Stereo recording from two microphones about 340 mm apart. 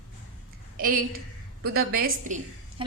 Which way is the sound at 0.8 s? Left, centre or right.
Right.